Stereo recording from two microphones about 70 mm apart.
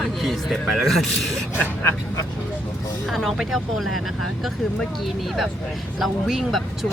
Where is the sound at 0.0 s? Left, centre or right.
Centre.